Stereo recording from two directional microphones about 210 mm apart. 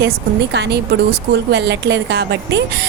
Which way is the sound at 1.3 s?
55° right (ahead or behind).